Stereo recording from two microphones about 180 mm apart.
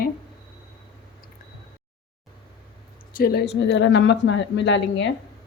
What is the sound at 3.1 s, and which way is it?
A woman's voice, 60° left (ahead or behind).